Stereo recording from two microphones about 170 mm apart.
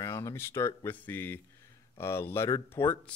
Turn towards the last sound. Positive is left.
turn(degrees=10)  # may be behind; listen again after turning